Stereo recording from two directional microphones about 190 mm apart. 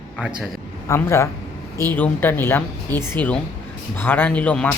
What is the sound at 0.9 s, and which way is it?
A man's voice, 15° left (ahead or behind).